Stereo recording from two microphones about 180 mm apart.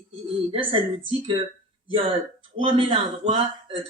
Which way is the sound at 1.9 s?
30° right (ahead or behind).